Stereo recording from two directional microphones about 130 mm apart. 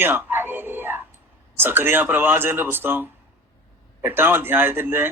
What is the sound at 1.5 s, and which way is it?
Speech, 15° right (ahead or behind).